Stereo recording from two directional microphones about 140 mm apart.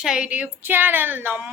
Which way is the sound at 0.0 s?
5° right (ahead or behind).